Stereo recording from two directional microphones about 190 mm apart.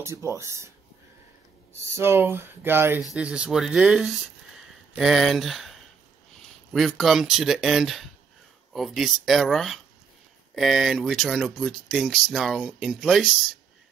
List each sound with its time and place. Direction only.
0.0 s speech: 15° right (ahead or behind)
1.7 s speech: 15° right (ahead or behind)